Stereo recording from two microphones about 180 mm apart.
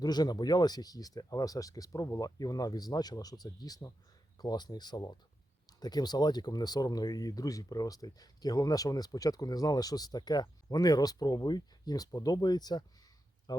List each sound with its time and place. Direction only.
0.0 s speech: 25° left (ahead or behind)